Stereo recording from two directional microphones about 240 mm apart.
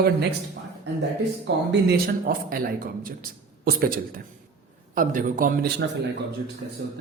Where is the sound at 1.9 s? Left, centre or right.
Right.